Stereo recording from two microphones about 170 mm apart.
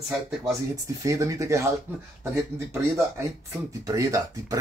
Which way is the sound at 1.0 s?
20° right (ahead or behind).